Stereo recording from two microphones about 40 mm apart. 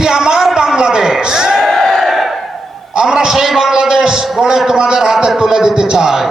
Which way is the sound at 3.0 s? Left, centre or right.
Centre.